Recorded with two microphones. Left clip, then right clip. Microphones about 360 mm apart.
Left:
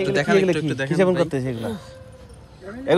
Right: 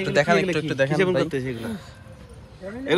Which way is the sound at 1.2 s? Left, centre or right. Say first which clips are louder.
Left 1 dB; centre.